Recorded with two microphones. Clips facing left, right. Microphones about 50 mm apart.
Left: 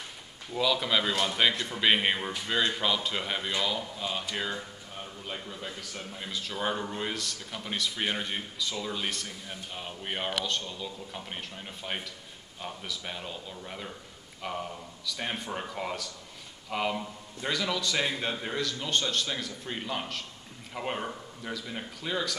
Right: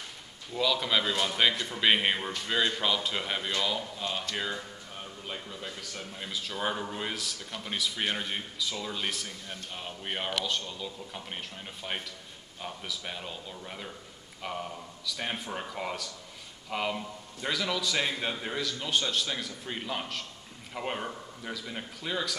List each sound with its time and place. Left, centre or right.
0.6 s a man's voice: centre